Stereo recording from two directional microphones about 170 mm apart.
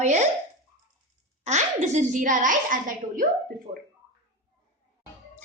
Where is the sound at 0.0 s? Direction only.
45° right (ahead or behind).